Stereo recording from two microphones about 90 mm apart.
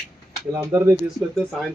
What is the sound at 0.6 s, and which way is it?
Speech, 30° right (ahead or behind).